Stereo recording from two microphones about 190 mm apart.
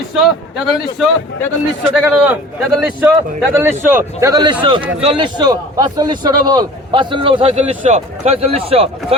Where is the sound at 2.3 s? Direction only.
10° right (ahead or behind).